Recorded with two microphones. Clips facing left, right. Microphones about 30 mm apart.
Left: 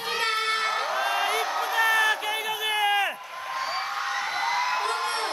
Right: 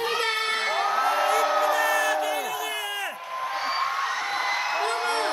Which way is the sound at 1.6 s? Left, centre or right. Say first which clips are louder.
Even; centre.